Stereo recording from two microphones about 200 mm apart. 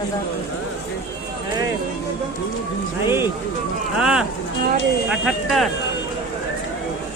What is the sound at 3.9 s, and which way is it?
Speech, 5° right (ahead or behind).